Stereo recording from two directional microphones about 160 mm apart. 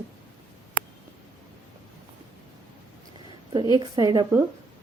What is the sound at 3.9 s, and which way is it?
Speech, 25° right (ahead or behind).